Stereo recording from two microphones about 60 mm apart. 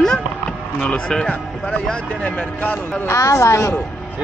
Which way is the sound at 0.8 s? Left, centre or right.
Centre.